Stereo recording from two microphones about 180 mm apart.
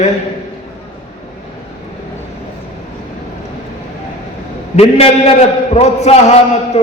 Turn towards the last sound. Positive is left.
turn(degrees=35)  # may be behind; listen again after turning